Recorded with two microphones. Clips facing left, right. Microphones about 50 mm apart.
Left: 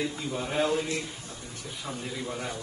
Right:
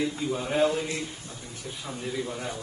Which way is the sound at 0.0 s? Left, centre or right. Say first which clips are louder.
Right 3 dB; centre.